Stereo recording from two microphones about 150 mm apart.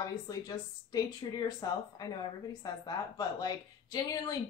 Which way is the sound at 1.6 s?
25° left (ahead or behind).